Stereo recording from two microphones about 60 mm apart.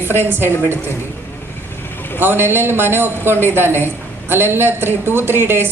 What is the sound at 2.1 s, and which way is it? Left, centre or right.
A woman's voice, right.